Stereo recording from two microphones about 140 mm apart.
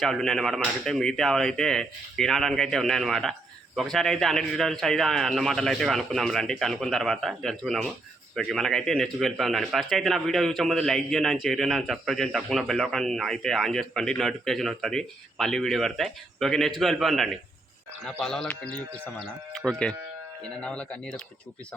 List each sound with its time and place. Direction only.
0.0 s speech: 5° left (ahead or behind)